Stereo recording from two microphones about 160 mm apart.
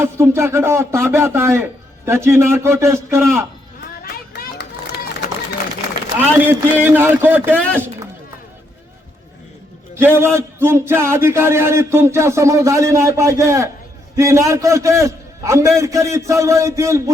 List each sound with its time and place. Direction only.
0.0 s a man's voice: 15° right (ahead or behind)
4.0 s run: 75° left (ahead or behind)
6.1 s a man's voice: 10° right (ahead or behind)
7.5 s a man's voice: 10° left (ahead or behind)
9.9 s a man's voice: 15° right (ahead or behind)